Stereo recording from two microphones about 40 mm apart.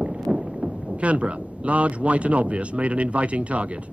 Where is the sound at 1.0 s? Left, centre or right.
Right.